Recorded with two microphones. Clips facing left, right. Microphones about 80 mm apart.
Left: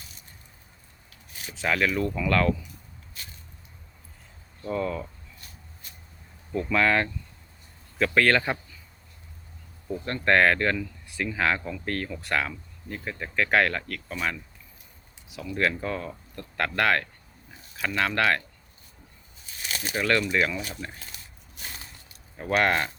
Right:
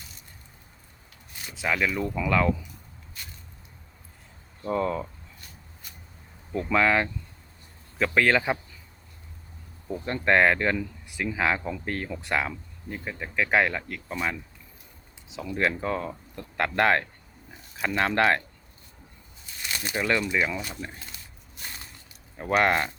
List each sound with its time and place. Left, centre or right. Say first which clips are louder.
1.5 s speech: left 1 dB; centre
4.6 s speech: right 2 dB; right
6.7 s speech: right 1 dB; centre
9.9 s speech: even; centre
20.0 s speech: left 1 dB; centre
22.4 s speech: right 1 dB; centre